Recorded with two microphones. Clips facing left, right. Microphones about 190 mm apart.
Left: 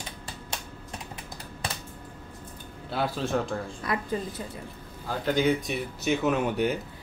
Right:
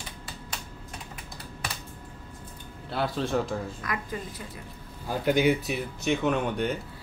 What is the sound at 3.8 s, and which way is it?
Speech, 30° left (ahead or behind).